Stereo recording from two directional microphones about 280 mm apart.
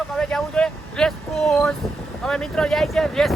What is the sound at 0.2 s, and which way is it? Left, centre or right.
Vehicle, centre.